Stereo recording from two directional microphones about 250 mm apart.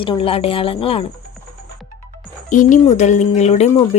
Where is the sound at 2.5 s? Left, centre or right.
Left.